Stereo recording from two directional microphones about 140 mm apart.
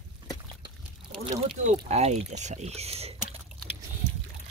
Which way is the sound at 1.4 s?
50° right (ahead or behind).